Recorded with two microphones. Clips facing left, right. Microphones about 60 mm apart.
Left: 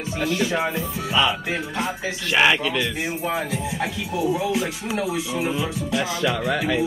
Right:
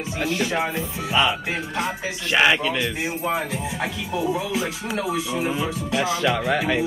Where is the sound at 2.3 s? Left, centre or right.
Centre.